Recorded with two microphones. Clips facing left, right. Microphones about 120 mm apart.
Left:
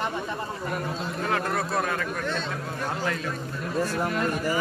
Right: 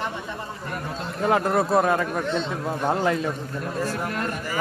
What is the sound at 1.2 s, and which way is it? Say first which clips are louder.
Speech: right 8 dB; 25° right (ahead or behind).